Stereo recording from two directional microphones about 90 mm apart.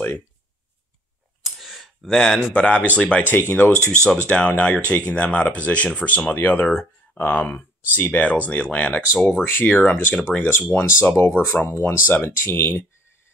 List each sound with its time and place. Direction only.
1.4 s speech: centre (ahead or behind); by 3.7 s 25° left (ahead or behind)
3.9 s speech: 10° left (ahead or behind)
11.0 s speech: 30° left (ahead or behind)